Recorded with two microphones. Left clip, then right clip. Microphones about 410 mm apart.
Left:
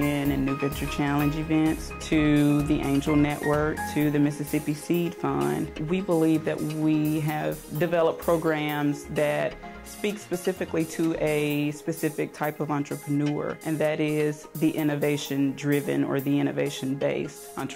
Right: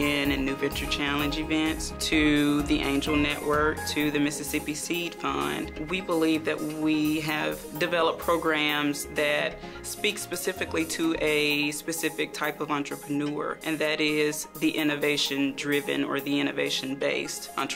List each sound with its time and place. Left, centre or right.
0.1 s music: left
0.9 s speech: left
3.2 s speech: left